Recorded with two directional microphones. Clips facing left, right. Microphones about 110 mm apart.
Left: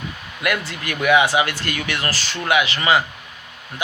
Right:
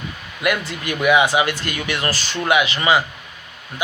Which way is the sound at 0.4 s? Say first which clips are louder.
Right 2 dB; 20° right (ahead or behind).